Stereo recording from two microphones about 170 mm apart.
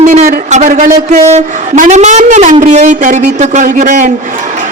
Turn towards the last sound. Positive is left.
turn(degrees=-50)  # may be behind; listen again after turning